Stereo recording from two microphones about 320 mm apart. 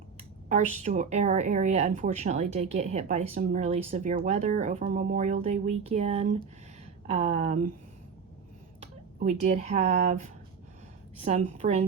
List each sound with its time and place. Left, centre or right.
0.4 s a woman's voice: right
9.1 s a woman's voice: right